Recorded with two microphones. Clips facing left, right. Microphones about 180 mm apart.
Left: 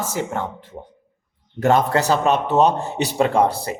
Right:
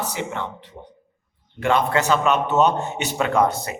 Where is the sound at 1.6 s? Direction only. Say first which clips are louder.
Left 3 dB; 40° left (ahead or behind).